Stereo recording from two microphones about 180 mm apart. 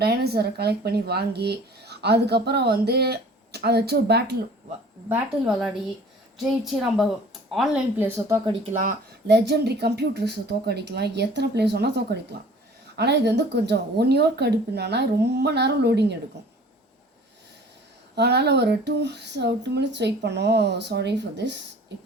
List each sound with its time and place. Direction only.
0.0 s a woman's voice: 60° right (ahead or behind)
5.0 s a woman's voice: 5° right (ahead or behind)
8.7 s speech: 50° right (ahead or behind)
9.2 s a woman's voice: 65° right (ahead or behind)
18.1 s speech: 65° right (ahead or behind)